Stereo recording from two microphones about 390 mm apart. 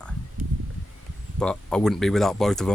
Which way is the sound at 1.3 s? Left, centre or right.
Centre.